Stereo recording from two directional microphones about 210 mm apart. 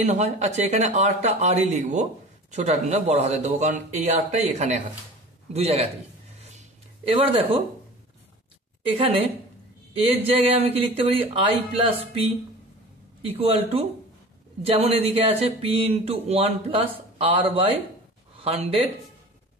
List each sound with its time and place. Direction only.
0.0 s speech: 35° right (ahead or behind)
7.1 s speech: 25° right (ahead or behind)
8.9 s speech: 25° right (ahead or behind)
13.2 s speech: 30° right (ahead or behind)